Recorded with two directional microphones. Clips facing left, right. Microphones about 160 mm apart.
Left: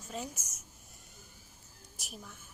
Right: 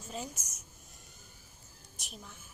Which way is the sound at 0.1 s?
Centre (ahead or behind).